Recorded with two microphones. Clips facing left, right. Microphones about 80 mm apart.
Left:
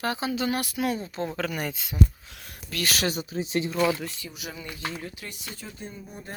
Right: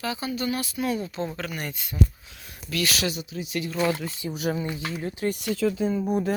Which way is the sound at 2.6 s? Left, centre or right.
Left.